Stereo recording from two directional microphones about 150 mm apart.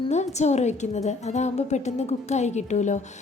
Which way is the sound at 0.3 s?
50° left (ahead or behind).